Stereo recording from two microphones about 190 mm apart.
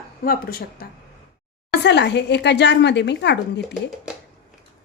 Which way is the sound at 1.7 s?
65° left (ahead or behind).